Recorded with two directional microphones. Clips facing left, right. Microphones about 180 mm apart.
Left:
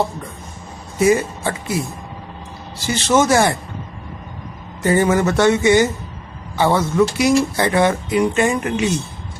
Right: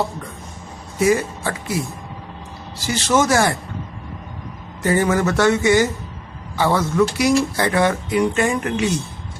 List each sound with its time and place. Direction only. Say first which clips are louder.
0.9 s speech: left 2 dB; 25° left (ahead or behind)
2.7 s speech: left 2 dB; 25° left (ahead or behind)
4.8 s speech: left 2 dB; 20° left (ahead or behind)